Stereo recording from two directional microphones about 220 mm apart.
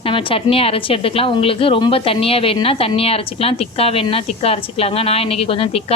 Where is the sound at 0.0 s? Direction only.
25° left (ahead or behind).